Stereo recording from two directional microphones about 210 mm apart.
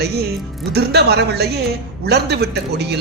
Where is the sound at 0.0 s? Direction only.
50° right (ahead or behind).